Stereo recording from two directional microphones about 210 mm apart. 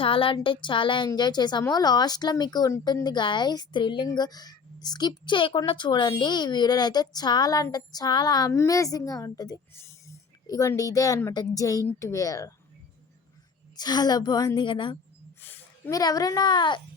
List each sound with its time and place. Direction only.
0.0 s speech: 25° left (ahead or behind)
13.7 s speech: 20° left (ahead or behind)
15.4 s speech: 10° left (ahead or behind)